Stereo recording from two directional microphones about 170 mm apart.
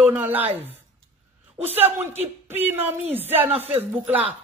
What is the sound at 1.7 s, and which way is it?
Speech, 40° right (ahead or behind).